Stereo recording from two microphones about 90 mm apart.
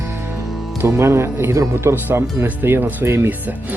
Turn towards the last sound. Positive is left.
turn(degrees=-25)  # may be behind; listen again after turning